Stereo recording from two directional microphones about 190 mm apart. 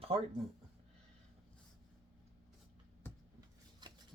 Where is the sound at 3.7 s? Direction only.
25° right (ahead or behind).